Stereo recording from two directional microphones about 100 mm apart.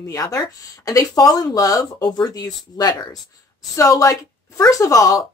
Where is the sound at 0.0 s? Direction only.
35° left (ahead or behind).